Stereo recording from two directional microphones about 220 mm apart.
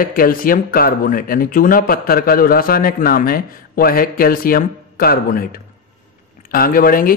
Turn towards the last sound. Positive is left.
turn(degrees=40)  # may be behind; listen again after turning